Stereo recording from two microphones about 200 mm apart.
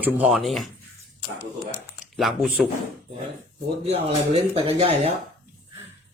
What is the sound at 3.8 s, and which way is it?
Speech, 30° right (ahead or behind).